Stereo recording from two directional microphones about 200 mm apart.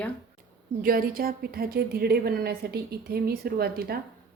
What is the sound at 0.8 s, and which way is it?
A woman's voice, 45° right (ahead or behind).